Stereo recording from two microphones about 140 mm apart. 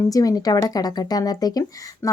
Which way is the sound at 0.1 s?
25° left (ahead or behind).